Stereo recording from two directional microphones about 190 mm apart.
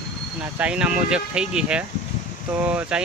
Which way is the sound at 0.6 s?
5° right (ahead or behind).